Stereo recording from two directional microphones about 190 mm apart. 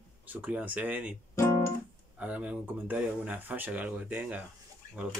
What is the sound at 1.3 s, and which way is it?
Guitar, 15° left (ahead or behind).